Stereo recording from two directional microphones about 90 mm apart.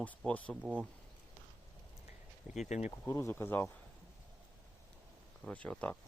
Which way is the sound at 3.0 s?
35° left (ahead or behind).